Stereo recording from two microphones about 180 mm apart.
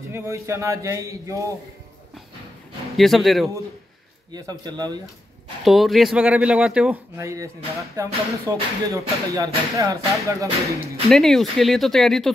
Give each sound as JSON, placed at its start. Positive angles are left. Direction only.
{"t": 0.1, "sound": "speech", "side_deg": -15}
{"t": 3.0, "sound": "speech", "side_deg": 0}
{"t": 4.3, "sound": "a man's voice", "side_deg": -20}
{"t": 5.6, "sound": "speech", "side_deg": 0}
{"t": 7.2, "sound": "speech", "side_deg": -15}
{"t": 11.1, "sound": "speech", "side_deg": 0}